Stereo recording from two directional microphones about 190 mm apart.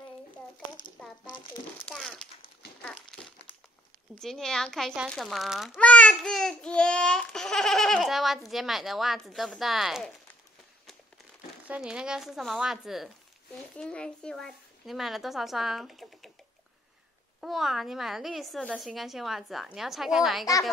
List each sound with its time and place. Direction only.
1.2 s speech: 20° left (ahead or behind)
1.9 s a child's voice: 5° left (ahead or behind)
2.8 s crumpling: 5° left (ahead or behind)
4.2 s a child's voice: 5° left (ahead or behind)
11.6 s a child's voice: 5° right (ahead or behind)
17.4 s a child's voice: centre (ahead or behind)